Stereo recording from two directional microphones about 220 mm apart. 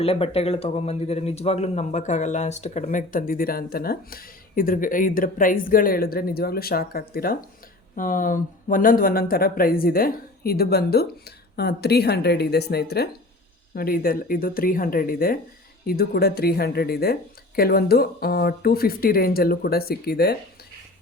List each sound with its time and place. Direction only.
0.0 s speech: 25° left (ahead or behind); by 20.3 s 45° left (ahead or behind)